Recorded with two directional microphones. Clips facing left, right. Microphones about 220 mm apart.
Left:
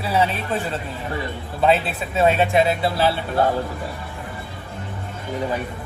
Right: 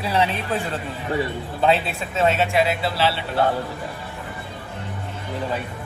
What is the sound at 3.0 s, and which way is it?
Speech, 45° left (ahead or behind).